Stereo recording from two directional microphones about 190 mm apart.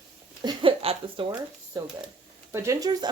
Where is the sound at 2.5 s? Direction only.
15° right (ahead or behind).